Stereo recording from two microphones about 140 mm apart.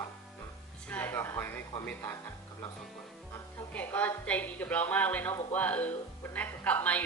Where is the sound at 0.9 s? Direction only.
10° left (ahead or behind).